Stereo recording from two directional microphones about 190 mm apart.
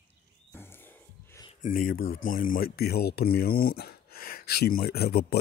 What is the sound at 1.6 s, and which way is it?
Speech, 50° left (ahead or behind).